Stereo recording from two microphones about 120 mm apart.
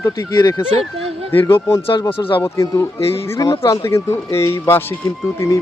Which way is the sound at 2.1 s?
45° left (ahead or behind).